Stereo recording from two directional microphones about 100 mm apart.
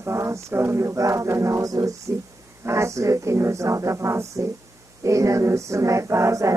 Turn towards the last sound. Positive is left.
turn(degrees=-30)  # may be behind; listen again after turning